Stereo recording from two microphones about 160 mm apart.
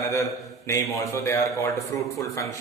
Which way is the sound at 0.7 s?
20° left (ahead or behind).